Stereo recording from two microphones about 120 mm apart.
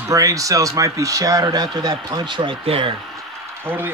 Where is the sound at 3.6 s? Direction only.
20° right (ahead or behind).